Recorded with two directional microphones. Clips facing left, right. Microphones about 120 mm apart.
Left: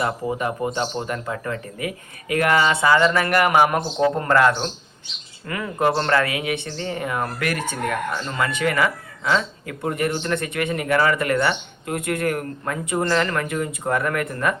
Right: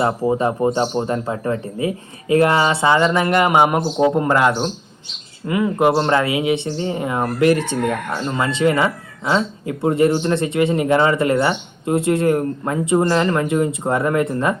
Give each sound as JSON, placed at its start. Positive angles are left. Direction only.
{"t": 0.0, "sound": "speech", "side_deg": -30}